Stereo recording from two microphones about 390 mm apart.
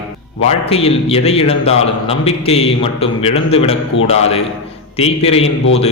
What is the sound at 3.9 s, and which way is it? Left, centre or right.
Speech, left.